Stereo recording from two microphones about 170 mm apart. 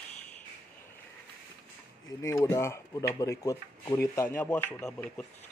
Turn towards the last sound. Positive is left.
turn(degrees=5)  # may be behind; listen again after turning